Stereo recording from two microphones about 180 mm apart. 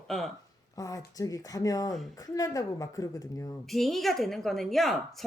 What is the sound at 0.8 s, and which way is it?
Speech, 20° left (ahead or behind).